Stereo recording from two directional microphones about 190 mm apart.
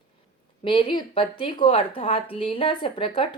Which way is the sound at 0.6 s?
25° left (ahead or behind).